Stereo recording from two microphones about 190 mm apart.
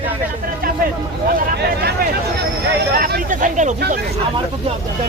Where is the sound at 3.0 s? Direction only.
45° right (ahead or behind).